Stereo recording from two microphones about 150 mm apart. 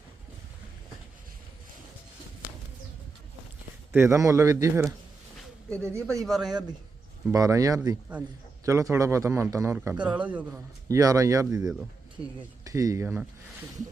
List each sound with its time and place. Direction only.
3.9 s a man's voice: 20° right (ahead or behind)
6.2 s speech: centre (ahead or behind)
7.3 s a man's voice: 20° right (ahead or behind)
9.7 s a man's voice: 10° right (ahead or behind)
10.8 s a man's voice: 20° right (ahead or behind)